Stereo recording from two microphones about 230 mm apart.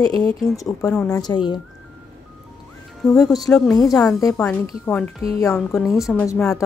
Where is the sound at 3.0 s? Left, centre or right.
Centre.